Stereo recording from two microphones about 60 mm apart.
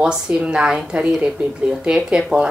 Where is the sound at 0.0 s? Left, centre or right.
Centre.